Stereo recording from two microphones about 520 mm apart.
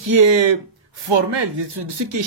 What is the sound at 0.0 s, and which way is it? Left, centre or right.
Speech, right.